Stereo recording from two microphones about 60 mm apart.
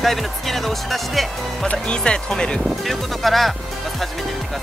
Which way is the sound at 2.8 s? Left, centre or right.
Centre.